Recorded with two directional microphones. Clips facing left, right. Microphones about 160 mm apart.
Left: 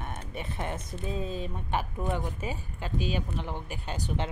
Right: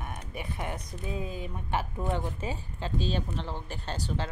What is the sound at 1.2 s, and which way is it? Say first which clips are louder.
Speech: left 2 dB; 25° left (ahead or behind).